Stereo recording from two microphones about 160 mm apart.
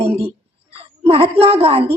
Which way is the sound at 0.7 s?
35° right (ahead or behind).